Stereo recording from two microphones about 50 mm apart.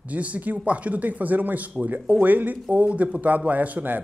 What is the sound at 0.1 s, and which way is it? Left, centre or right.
A man's voice, right.